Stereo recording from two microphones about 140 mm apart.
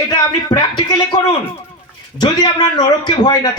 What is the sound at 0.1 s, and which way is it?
Speech, 30° left (ahead or behind).